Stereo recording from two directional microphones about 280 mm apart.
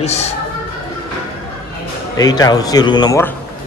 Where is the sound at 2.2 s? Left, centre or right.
Centre.